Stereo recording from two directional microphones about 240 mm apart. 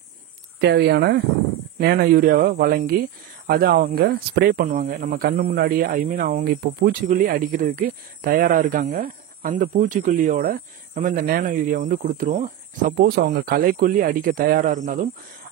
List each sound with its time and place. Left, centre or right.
0.6 s speech: right